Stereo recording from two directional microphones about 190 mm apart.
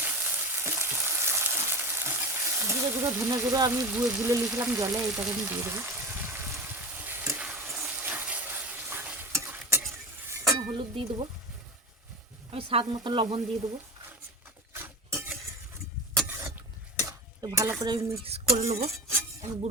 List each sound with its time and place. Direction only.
0.0 s frying: 10° right (ahead or behind)
5.3 s water: 10° right (ahead or behind)
7.7 s stir: 5° right (ahead or behind)
10.2 s chink: 15° right (ahead or behind)
10.8 s speech: 25° right (ahead or behind)
12.5 s a sound: 30° right (ahead or behind)
12.8 s speech: 20° right (ahead or behind)
14.7 s a sound: 15° right (ahead or behind)
16.1 s vehicle: 10° right (ahead or behind)
17.0 s speech: 15° right (ahead or behind)
18.5 s music: 35° right (ahead or behind)